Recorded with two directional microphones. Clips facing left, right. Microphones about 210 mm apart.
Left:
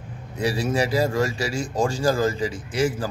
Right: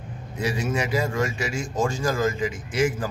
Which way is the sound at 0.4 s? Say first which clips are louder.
Left 3 dB; 35° left (ahead or behind).